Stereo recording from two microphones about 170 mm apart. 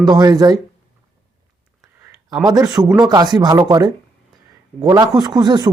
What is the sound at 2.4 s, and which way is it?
Speech, 20° right (ahead or behind).